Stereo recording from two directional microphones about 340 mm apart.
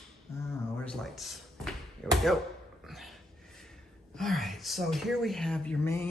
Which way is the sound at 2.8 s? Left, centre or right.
Centre.